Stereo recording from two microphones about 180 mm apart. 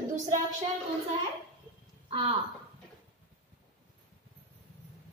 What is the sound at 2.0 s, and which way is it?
Speech, 30° right (ahead or behind).